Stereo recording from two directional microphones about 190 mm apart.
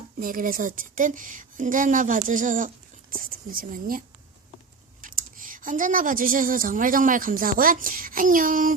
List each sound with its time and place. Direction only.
0.2 s a woman's voice: 45° right (ahead or behind)